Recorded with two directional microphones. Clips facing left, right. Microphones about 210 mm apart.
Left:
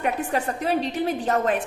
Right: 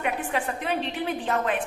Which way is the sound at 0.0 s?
40° left (ahead or behind).